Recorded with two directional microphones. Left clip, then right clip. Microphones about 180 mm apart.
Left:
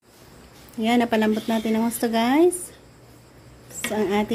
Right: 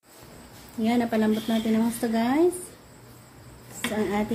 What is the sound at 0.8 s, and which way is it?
Speech, 45° left (ahead or behind).